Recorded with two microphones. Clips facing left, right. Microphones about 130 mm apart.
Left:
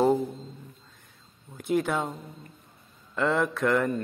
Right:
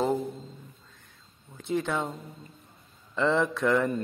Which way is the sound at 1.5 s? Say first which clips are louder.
Left 3 dB; 5° left (ahead or behind).